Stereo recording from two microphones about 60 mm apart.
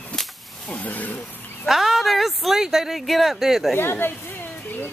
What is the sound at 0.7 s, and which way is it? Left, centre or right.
Speech, left.